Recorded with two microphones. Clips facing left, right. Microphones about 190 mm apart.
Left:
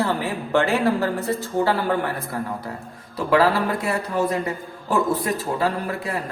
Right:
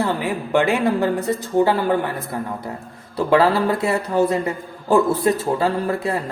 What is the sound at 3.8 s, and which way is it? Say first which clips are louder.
Speech: right 4 dB; 30° right (ahead or behind).